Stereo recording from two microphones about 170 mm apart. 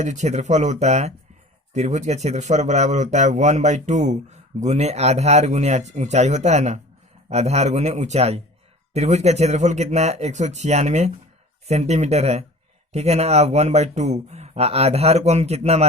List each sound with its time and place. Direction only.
0.0 s speech: 45° right (ahead or behind)